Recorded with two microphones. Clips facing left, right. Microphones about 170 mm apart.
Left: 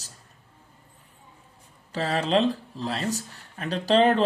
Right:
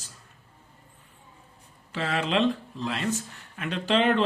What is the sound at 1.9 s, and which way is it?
Speech, 40° left (ahead or behind).